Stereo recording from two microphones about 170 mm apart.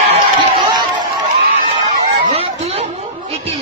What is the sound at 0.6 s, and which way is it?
Chatter, 25° right (ahead or behind).